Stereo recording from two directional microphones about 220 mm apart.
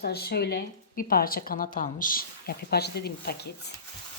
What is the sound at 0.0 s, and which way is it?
A woman's voice, 45° left (ahead or behind).